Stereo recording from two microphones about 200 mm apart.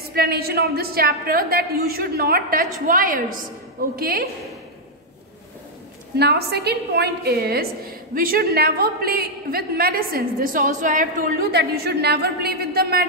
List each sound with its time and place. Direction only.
0.1 s a woman's voice: 50° right (ahead or behind)
6.1 s a woman's voice: 55° right (ahead or behind)